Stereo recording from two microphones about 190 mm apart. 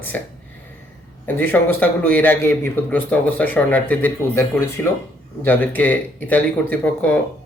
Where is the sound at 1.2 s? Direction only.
10° left (ahead or behind).